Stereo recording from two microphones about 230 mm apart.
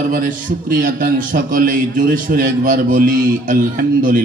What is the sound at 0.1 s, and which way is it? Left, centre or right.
Speech, right.